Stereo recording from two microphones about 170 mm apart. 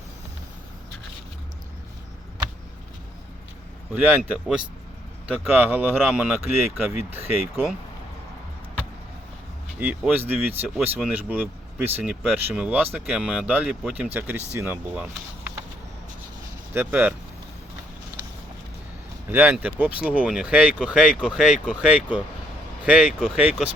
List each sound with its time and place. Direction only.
3.9 s speech: 10° right (ahead or behind)
9.8 s speech: 10° right (ahead or behind)
16.7 s speech: 10° right (ahead or behind)
19.3 s speech: 10° right (ahead or behind)